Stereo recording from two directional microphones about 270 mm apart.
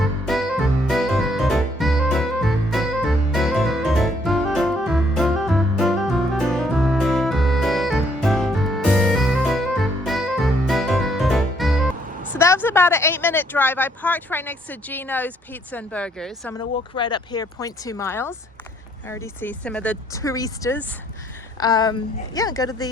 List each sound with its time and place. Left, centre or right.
0.0 s music: centre
12.4 s speech: centre
16.9 s speech: centre